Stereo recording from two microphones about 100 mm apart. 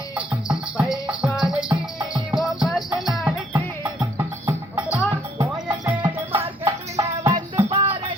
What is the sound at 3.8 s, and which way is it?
Music, 25° right (ahead or behind).